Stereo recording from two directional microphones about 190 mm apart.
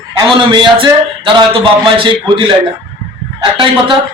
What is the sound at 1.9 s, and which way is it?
A man's voice, 25° right (ahead or behind).